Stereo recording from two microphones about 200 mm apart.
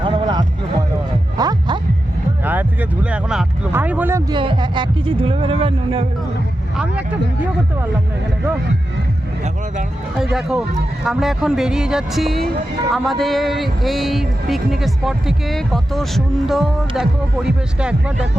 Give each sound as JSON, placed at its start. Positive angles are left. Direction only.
{"t": 0.0, "sound": "music", "side_deg": -25}
{"t": 2.4, "sound": "speech", "side_deg": -10}
{"t": 4.4, "sound": "speech", "side_deg": -25}
{"t": 11.0, "sound": "a man's voice", "side_deg": 0}